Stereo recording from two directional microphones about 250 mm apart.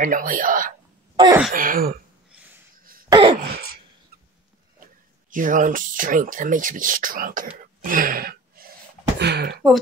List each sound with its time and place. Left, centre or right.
0.0 s speech: right
1.1 s wail: centre
1.5 s speech: right
2.8 s cough: right
3.1 s throat clearing: centre
3.4 s wail: right
5.3 s speech: right
7.4 s cough: right
9.2 s speech: right